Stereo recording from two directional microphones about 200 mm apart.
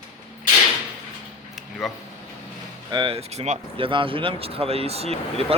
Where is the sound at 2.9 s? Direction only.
25° right (ahead or behind).